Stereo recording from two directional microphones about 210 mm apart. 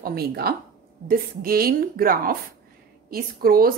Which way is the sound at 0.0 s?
50° right (ahead or behind).